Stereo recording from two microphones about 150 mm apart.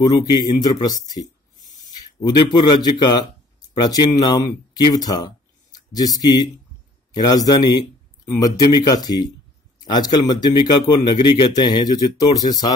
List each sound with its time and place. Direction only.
0.0 s speech: 25° left (ahead or behind)